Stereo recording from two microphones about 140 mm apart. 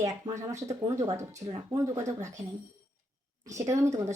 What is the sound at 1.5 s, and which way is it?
Speech, 35° right (ahead or behind).